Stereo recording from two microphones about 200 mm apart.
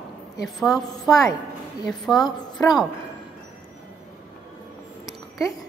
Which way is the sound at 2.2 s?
20° left (ahead or behind).